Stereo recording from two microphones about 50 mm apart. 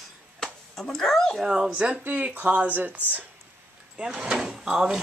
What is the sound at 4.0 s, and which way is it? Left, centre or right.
Speech, centre.